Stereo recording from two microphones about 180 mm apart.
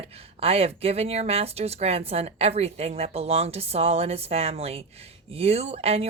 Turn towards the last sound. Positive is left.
turn(degrees=-35)  # may be behind; listen again after turning